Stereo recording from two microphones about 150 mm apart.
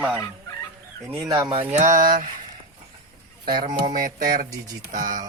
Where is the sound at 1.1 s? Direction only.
20° right (ahead or behind).